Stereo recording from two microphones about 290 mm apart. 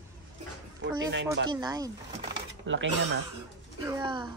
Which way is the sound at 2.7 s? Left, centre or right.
Right.